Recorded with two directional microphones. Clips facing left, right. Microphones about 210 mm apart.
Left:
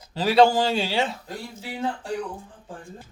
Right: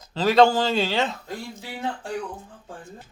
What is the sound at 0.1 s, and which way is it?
Speech, 10° left (ahead or behind).